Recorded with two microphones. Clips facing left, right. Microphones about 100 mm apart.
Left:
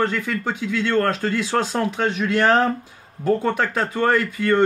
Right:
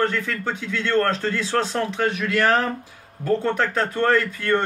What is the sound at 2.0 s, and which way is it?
Speech, 25° left (ahead or behind).